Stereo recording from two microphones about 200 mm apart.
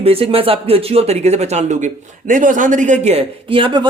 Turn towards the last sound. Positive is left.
turn(degrees=-25)  # may be behind; listen again after turning